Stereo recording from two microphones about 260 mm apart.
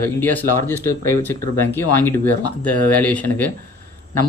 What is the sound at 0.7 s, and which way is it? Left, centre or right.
Speech, centre.